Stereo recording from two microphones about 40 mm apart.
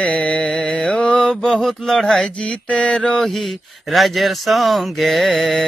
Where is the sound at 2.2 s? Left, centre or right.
Left.